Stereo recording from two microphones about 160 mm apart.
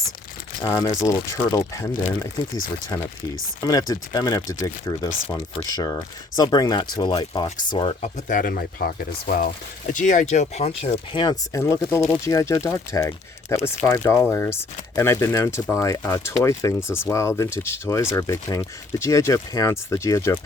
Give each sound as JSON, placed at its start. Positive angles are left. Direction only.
{"t": 0.6, "sound": "speech", "side_deg": 20}
{"t": 3.6, "sound": "speech", "side_deg": 20}
{"t": 8.0, "sound": "speech", "side_deg": 55}